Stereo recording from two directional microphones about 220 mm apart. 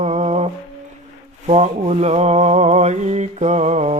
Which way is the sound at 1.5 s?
30° right (ahead or behind).